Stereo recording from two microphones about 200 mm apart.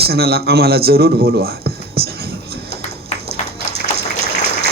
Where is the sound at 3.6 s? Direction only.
50° right (ahead or behind).